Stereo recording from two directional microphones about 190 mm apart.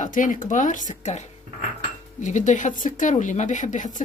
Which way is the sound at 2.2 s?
40° left (ahead or behind).